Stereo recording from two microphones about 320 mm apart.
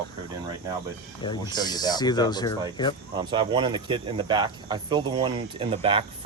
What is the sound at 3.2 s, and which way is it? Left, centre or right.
Speech, centre.